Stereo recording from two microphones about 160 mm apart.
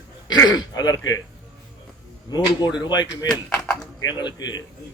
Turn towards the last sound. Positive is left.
turn(degrees=25)  # may be behind; listen again after turning